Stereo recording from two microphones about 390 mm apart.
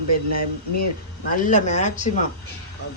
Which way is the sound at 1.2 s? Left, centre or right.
Centre.